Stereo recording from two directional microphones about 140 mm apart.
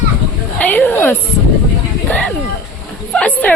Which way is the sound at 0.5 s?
10° left (ahead or behind).